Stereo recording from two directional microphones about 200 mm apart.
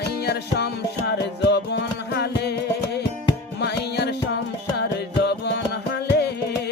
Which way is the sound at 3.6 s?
55° left (ahead or behind).